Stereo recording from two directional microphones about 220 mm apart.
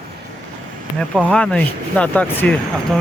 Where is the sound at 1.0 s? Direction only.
5° left (ahead or behind).